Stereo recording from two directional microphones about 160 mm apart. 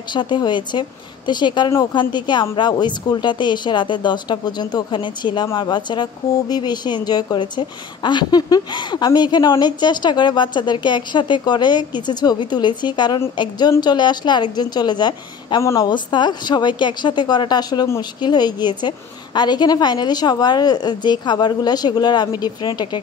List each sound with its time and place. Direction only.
0.1 s a woman's voice: 30° left (ahead or behind)